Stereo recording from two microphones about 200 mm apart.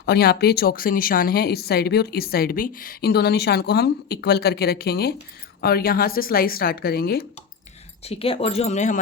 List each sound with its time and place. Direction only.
0.0 s speech: 55° left (ahead or behind)
8.0 s speech: 30° left (ahead or behind)